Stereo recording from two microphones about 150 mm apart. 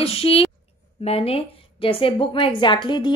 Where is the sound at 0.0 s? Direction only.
40° left (ahead or behind).